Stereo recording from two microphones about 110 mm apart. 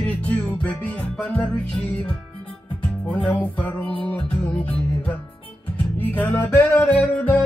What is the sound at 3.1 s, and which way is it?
Music, 10° left (ahead or behind).